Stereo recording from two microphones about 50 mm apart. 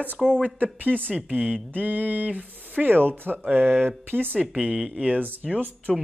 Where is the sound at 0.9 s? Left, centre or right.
Left.